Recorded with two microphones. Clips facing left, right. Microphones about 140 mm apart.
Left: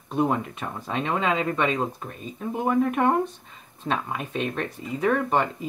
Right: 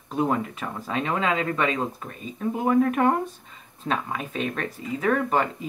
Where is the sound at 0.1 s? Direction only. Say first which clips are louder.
Even; centre (ahead or behind).